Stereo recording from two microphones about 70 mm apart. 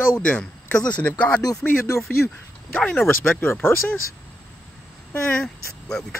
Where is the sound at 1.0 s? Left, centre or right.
Left.